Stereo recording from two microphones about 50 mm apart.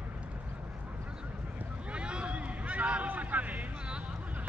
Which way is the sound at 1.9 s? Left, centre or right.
Right.